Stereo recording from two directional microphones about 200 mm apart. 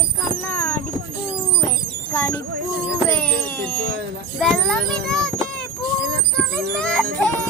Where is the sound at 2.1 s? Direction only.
5° left (ahead or behind).